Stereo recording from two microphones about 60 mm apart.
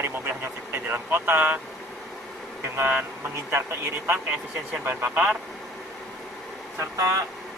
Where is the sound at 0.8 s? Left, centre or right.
Right.